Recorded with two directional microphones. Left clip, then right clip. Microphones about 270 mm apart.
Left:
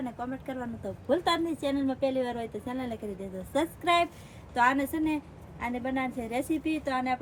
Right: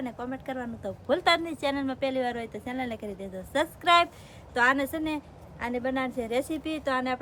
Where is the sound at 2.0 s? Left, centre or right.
Centre.